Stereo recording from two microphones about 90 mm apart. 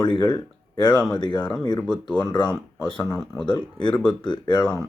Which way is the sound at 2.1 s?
50° left (ahead or behind).